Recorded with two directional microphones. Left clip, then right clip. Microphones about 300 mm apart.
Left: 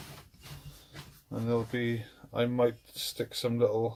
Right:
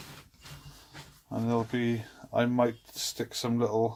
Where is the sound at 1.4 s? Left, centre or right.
Right.